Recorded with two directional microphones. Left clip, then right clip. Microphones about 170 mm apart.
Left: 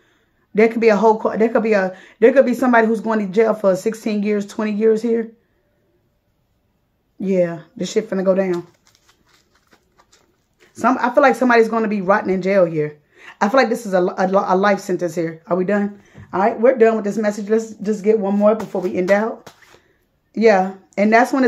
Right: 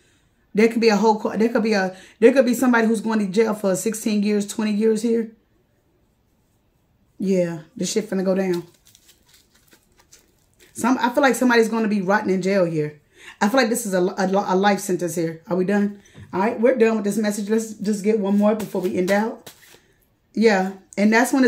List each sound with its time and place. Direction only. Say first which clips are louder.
0.6 s speech: left 4 dB; 30° right (ahead or behind)
7.2 s speech: left 4 dB; 25° right (ahead or behind)
9.7 s a sound: left 1 dB; 5° right (ahead or behind)
10.7 s speech: left 4 dB; 30° right (ahead or behind)